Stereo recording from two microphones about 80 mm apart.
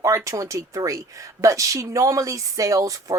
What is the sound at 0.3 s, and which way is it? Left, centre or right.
Speech, right.